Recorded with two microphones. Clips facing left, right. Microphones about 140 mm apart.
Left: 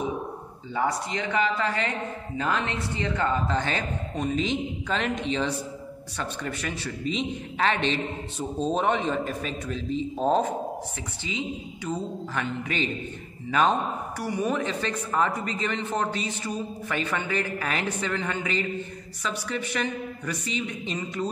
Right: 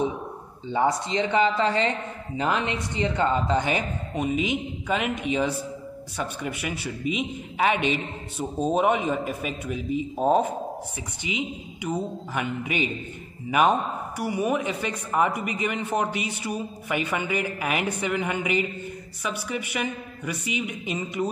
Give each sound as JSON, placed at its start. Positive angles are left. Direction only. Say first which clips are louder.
{"t": 0.7, "sound": "speech", "louder": "right 4 dB", "side_deg": -20}